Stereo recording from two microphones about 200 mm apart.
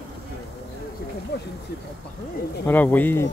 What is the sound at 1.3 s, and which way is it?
Speech, 55° left (ahead or behind).